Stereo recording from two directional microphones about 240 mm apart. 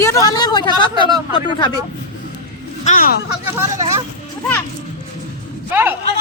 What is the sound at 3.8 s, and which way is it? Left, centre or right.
Speech, centre.